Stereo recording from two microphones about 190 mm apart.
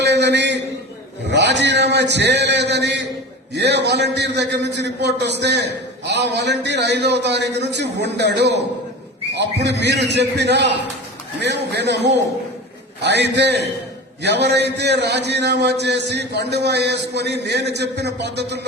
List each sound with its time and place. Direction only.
0.0 s a sound: 65° right (ahead or behind)
3.5 s a man's voice: 65° right (ahead or behind)
13.0 s a man's voice: 65° right (ahead or behind)